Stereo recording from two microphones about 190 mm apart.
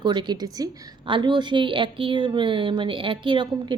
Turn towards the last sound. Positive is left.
turn(degrees=-25)  # may be behind; listen again after turning